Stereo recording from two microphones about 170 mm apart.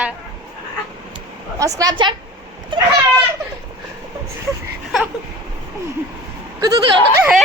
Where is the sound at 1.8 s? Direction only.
25° right (ahead or behind).